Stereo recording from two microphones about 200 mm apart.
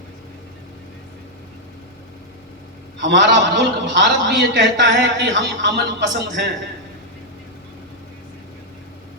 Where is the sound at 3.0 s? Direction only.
60° right (ahead or behind).